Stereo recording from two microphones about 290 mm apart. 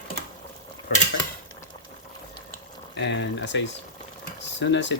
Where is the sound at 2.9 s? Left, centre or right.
Left.